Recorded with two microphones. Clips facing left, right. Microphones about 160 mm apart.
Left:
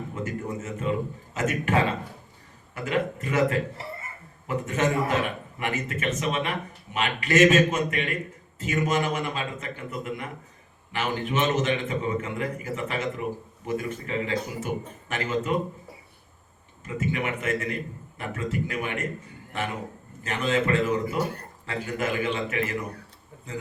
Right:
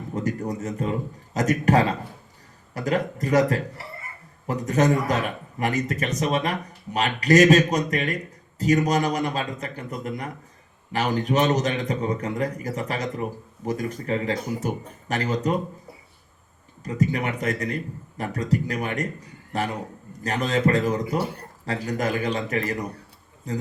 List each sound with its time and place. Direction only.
0.1 s a man's voice: 40° right (ahead or behind)
16.8 s a man's voice: 40° right (ahead or behind)